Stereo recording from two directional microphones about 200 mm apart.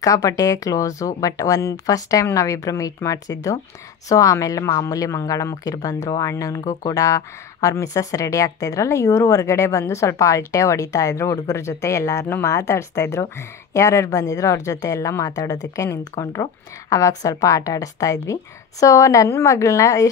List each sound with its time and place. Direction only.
0.0 s speech: 15° left (ahead or behind)